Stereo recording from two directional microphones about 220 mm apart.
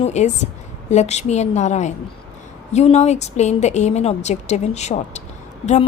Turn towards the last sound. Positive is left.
turn(degrees=30)  # may be behind; listen again after turning